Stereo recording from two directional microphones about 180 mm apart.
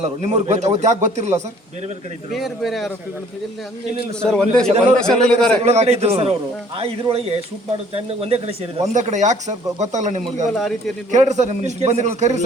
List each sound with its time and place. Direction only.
0.0 s speech: 40° right (ahead or behind)
2.3 s a man's voice: centre (ahead or behind)
4.2 s a man's voice: 5° left (ahead or behind)
5.6 s speech: 35° right (ahead or behind)
10.5 s a man's voice: centre (ahead or behind)
11.1 s speech: 40° right (ahead or behind)